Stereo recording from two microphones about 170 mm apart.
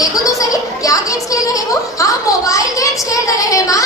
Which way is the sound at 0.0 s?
20° left (ahead or behind).